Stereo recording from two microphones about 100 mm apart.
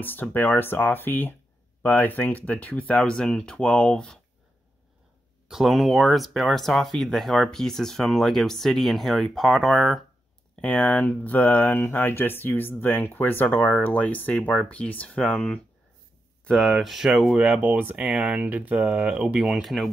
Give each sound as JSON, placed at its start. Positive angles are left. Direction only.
{"t": 0.0, "sound": "speech", "side_deg": 20}
{"t": 5.5, "sound": "speech", "side_deg": 0}
{"t": 10.5, "sound": "speech", "side_deg": 15}
{"t": 16.4, "sound": "speech", "side_deg": 0}